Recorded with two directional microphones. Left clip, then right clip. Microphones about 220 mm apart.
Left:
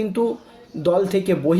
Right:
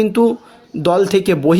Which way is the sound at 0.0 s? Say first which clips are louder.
Right 8 dB; 45° right (ahead or behind).